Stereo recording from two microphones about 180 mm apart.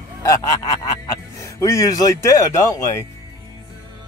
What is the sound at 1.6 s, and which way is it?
Speech, 20° left (ahead or behind).